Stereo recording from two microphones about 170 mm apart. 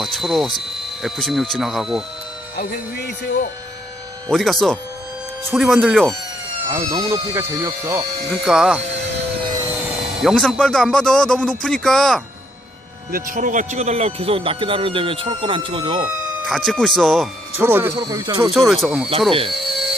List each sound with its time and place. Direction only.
0.0 s speech: centre (ahead or behind)
2.6 s speech: 70° left (ahead or behind)
4.3 s speech: centre (ahead or behind)
5.5 s speech: 5° right (ahead or behind)
6.7 s speech: 20° right (ahead or behind)
8.3 s speech: centre (ahead or behind)
10.2 s speech: 5° left (ahead or behind)
13.1 s speech: 55° right (ahead or behind); by 16.0 s 25° right (ahead or behind)
16.5 s speech: centre (ahead or behind)
17.6 s speech: 15° right (ahead or behind)
17.9 s speech: 25° right (ahead or behind)
18.7 s speech: 5° right (ahead or behind)
19.3 s speech: 30° right (ahead or behind)
19.5 s a sound: centre (ahead or behind)